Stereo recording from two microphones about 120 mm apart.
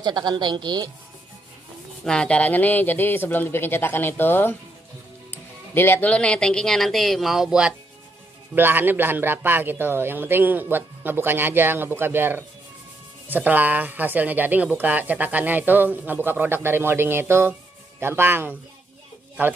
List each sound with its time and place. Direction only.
0.0 s a woman's voice: 35° right (ahead or behind)
2.0 s speech: 10° left (ahead or behind)
8.5 s speech: 15° right (ahead or behind)